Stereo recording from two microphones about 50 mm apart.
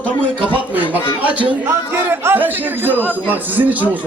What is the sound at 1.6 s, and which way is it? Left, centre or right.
A man's voice, right.